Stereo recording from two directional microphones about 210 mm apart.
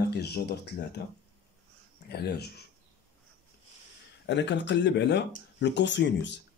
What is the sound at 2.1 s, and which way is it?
Speech, 50° left (ahead or behind).